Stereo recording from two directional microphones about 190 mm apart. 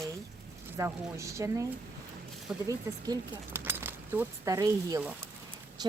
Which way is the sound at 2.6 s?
15° right (ahead or behind).